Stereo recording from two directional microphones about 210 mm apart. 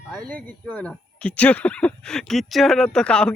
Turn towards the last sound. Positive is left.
turn(degrees=5)  # may be behind; listen again after turning